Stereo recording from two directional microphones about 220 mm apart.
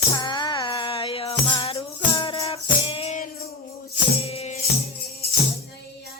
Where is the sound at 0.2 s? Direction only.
20° left (ahead or behind).